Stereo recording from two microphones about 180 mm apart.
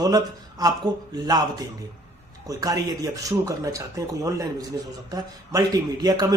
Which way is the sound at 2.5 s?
20° right (ahead or behind).